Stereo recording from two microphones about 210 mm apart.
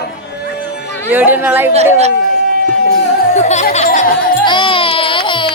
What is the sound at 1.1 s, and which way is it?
Speech, 10° right (ahead or behind).